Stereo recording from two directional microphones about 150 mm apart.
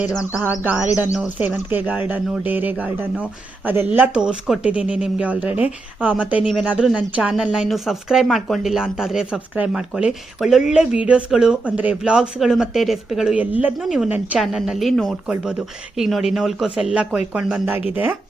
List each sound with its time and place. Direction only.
0.6 s speech: 10° right (ahead or behind)
2.7 s speech: 5° left (ahead or behind)
3.2 s speech: 10° right (ahead or behind)